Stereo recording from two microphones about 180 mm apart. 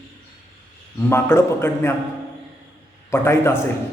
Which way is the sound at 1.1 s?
15° left (ahead or behind).